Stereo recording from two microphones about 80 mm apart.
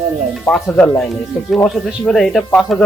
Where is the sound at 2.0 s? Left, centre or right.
Centre.